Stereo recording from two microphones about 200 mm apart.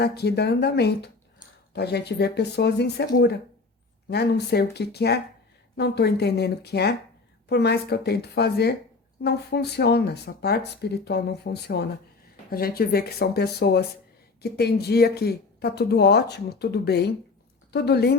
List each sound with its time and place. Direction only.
0.0 s a woman's voice: 55° left (ahead or behind)